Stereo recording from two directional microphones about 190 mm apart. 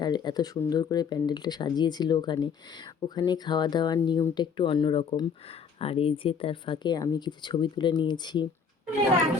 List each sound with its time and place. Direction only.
0.0 s speech: 20° left (ahead or behind)